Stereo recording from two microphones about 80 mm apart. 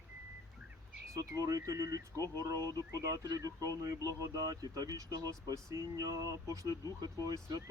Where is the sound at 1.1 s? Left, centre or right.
Right.